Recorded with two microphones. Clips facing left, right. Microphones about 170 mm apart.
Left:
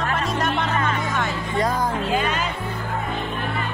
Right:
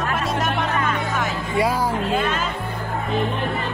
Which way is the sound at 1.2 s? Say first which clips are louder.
Right 1 dB; 5° right (ahead or behind).